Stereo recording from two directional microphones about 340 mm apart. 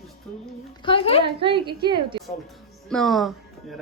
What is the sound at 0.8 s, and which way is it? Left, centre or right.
Speech, centre.